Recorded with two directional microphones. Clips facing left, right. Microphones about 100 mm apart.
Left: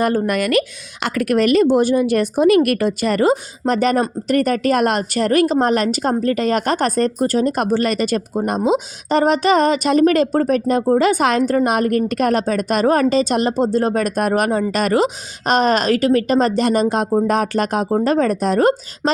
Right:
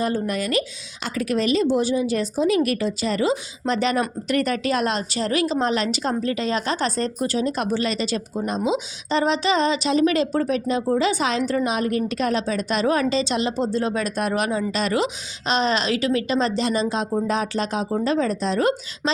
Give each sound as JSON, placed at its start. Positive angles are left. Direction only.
{"t": 0.0, "sound": "a woman's voice", "side_deg": 60}